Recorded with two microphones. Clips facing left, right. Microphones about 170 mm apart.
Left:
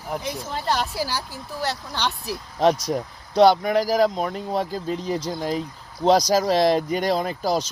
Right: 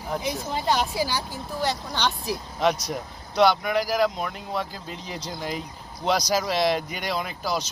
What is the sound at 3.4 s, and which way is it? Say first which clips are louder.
Speech: left 4 dB; 40° left (ahead or behind).